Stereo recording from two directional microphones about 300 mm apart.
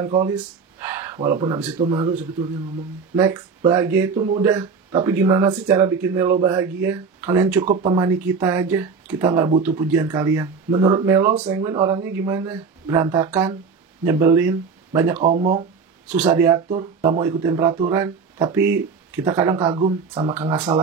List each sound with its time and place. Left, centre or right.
0.0 s speech: centre
3.2 s speech: centre
15.1 s speech: right
16.3 s speech: centre
16.6 s speech: right
17.2 s speech: centre